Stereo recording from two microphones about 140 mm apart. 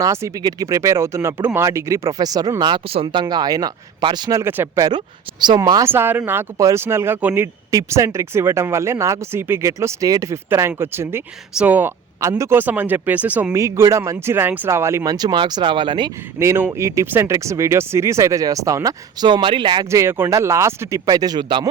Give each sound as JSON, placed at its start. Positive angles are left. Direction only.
{"t": 0.0, "sound": "speech", "side_deg": -20}
{"t": 4.9, "sound": "speech", "side_deg": -30}
{"t": 5.9, "sound": "speech", "side_deg": -15}
{"t": 13.5, "sound": "speech", "side_deg": -20}
{"t": 16.4, "sound": "speech", "side_deg": -15}